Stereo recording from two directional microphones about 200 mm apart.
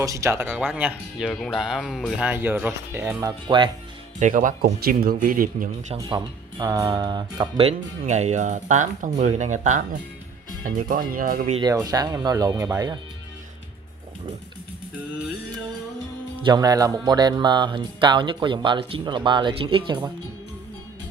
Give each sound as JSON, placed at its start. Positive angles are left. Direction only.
{"t": 0.0, "sound": "speech", "side_deg": -15}
{"t": 3.4, "sound": "speech", "side_deg": -25}
{"t": 4.2, "sound": "speech", "side_deg": -40}
{"t": 6.0, "sound": "speech", "side_deg": -20}
{"t": 11.5, "sound": "speech", "side_deg": -20}
{"t": 16.4, "sound": "speech", "side_deg": -20}